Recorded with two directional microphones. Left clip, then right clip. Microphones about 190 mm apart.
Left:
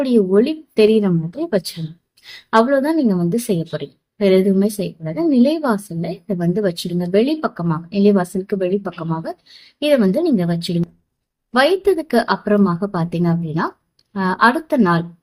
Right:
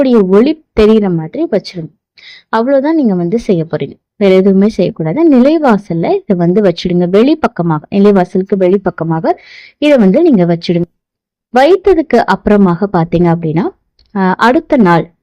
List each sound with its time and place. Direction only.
0.0 s a woman's voice: 40° right (ahead or behind)